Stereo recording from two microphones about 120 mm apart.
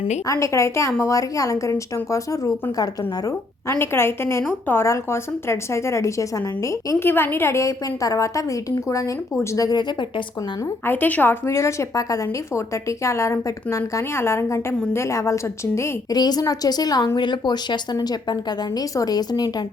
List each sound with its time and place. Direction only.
0.3 s a woman's voice: 25° left (ahead or behind)
10.8 s a woman's voice: 15° left (ahead or behind); by 19.6 s 35° left (ahead or behind)